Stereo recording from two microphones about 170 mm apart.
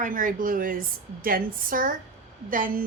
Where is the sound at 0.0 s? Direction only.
50° right (ahead or behind).